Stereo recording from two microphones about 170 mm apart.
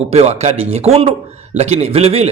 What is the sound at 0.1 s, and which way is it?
A man's voice, 40° right (ahead or behind).